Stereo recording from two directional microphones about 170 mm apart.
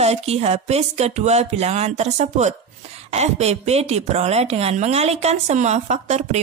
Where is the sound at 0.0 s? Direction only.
40° right (ahead or behind).